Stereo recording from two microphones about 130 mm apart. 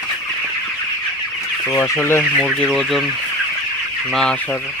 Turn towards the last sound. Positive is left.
turn(degrees=0)  # may be behind; listen again after turning